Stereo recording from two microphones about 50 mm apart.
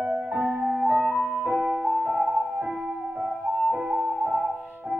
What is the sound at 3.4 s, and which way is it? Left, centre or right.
Music, right.